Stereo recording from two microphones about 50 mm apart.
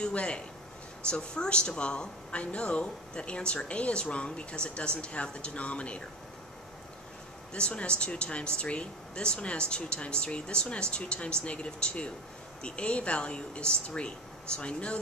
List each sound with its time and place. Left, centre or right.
0.0 s a woman's voice: left
7.5 s a woman's voice: centre